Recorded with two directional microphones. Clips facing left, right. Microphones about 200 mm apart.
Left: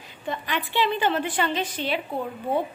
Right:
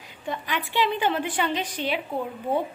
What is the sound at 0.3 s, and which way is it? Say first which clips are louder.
A woman's voice: left 1 dB; 5° right (ahead or behind).